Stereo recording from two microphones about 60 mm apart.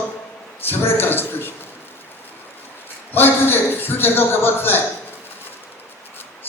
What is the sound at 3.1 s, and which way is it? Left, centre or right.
A man's voice, left.